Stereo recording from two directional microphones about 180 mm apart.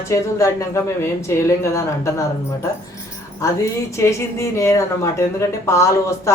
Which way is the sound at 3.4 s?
15° left (ahead or behind).